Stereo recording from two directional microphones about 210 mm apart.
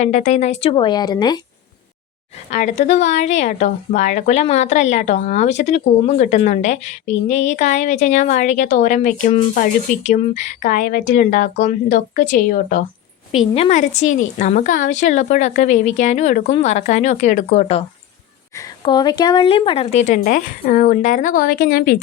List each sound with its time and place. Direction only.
0.0 s speech: 35° left (ahead or behind)
2.5 s a woman's voice: 35° left (ahead or behind)
13.5 s a woman's voice: 30° left (ahead or behind)
18.5 s a woman's voice: 20° left (ahead or behind); by 22.0 s 45° left (ahead or behind)